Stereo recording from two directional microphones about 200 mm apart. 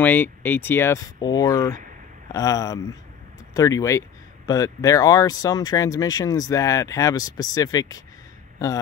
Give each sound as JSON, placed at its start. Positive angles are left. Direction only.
{"t": 0.0, "sound": "speech", "side_deg": 10}